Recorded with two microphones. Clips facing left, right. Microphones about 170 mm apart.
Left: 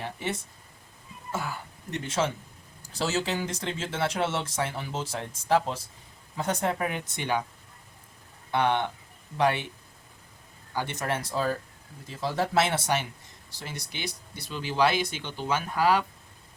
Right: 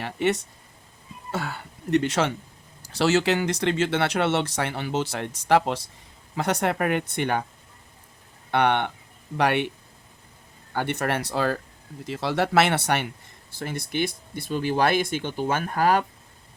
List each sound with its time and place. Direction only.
0.0 s speech: 70° right (ahead or behind); by 7.4 s 55° right (ahead or behind)
8.4 s speech: 65° right (ahead or behind)
10.8 s speech: 60° right (ahead or behind)
13.5 s speech: 55° right (ahead or behind)